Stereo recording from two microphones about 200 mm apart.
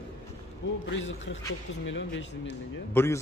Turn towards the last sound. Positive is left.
turn(degrees=15)  # may be behind; listen again after turning